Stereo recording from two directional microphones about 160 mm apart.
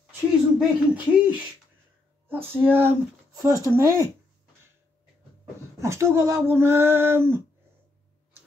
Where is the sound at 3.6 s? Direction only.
20° right (ahead or behind).